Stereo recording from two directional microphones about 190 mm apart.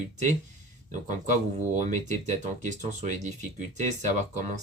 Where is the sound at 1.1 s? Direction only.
40° right (ahead or behind).